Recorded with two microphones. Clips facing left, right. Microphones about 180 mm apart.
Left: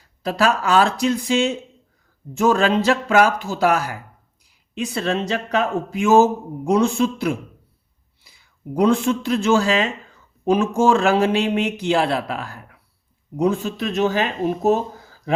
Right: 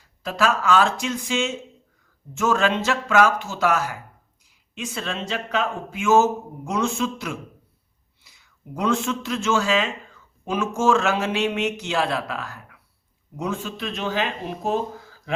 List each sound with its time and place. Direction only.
0.2 s speech: 35° left (ahead or behind)